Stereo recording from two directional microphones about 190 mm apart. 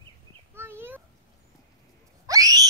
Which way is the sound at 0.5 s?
10° right (ahead or behind).